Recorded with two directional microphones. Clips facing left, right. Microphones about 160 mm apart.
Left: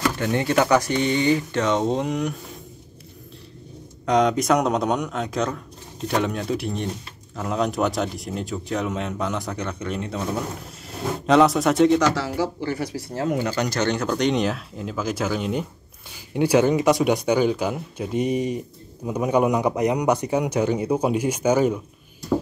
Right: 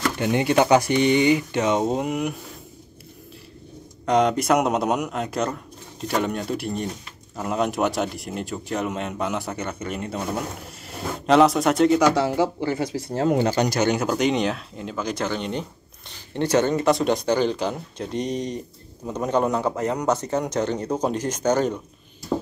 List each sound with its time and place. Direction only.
0.2 s speech: 15° right (ahead or behind)
4.0 s a man's voice: 5° right (ahead or behind)
12.4 s speech: 20° right (ahead or behind)
13.6 s a man's voice: 10° right (ahead or behind); by 21.8 s 10° left (ahead or behind)